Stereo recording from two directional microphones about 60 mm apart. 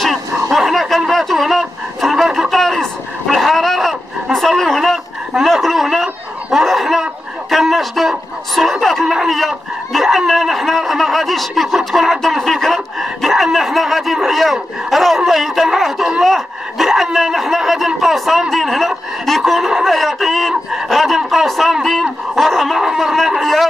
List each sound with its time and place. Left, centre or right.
0.0 s a sound: centre
9.0 s dog: centre
18.5 s snicker: centre